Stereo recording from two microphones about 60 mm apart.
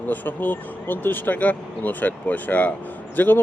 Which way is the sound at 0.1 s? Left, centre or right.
Left.